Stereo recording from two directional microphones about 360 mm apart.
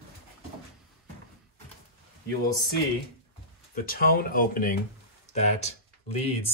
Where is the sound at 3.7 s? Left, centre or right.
Left.